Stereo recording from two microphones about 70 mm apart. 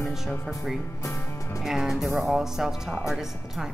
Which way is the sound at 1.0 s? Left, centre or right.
Left.